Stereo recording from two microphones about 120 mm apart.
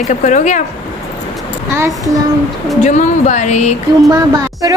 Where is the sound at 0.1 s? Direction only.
90° left.